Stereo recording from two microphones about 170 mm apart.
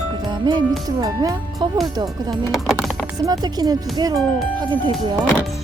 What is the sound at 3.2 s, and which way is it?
Speech, 20° right (ahead or behind).